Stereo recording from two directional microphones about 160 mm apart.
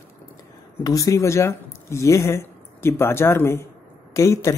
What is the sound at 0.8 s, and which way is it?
Speech, 20° left (ahead or behind).